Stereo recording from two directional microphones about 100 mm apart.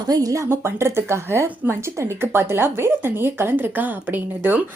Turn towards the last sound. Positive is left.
turn(degrees=-20)  # may be behind; listen again after turning